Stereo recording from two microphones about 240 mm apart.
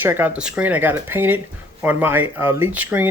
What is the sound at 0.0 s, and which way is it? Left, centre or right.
Speech, centre.